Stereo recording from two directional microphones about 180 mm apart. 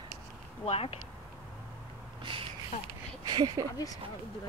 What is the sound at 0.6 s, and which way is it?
Speech, 35° left (ahead or behind).